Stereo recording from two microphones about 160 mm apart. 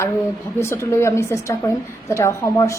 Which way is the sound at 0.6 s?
15° left (ahead or behind).